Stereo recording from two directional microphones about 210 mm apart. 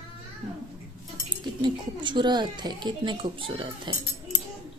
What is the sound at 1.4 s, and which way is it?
Speech, 20° right (ahead or behind).